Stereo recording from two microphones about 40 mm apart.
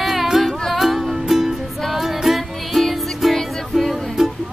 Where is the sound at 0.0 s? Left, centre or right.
Centre.